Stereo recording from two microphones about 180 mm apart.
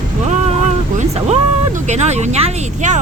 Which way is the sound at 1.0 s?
35° right (ahead or behind).